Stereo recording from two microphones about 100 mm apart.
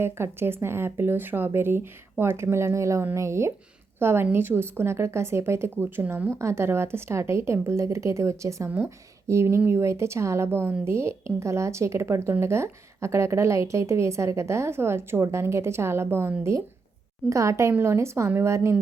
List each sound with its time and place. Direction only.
0.0 s a woman's voice: 25° right (ahead or behind)